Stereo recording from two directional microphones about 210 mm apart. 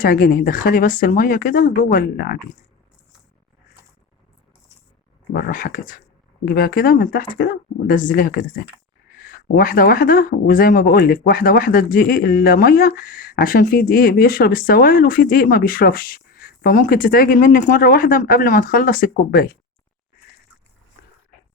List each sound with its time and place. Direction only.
0.0 s speech: 40° left (ahead or behind)
5.3 s speech: 40° left (ahead or behind)